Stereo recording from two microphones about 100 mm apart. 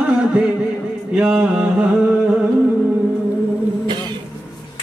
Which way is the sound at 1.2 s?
10° right (ahead or behind).